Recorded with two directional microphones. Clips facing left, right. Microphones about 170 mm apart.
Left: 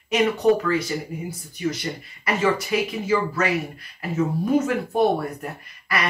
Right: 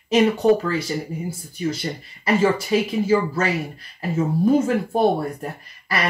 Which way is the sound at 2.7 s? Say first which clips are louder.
Right 4 dB; 30° right (ahead or behind).